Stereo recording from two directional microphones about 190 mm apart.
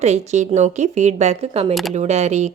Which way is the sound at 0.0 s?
35° right (ahead or behind).